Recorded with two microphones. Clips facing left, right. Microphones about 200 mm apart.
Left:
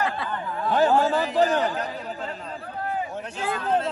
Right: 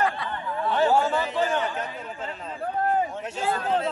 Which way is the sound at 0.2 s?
40° left (ahead or behind).